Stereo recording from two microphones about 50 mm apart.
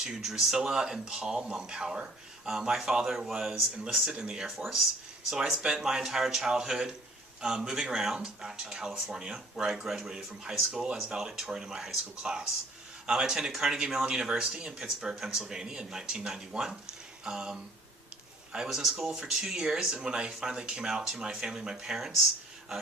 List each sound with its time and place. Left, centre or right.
0.0 s speech: centre
9.1 s speech: centre